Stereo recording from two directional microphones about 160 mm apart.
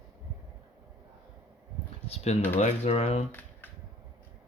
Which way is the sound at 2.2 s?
40° left (ahead or behind).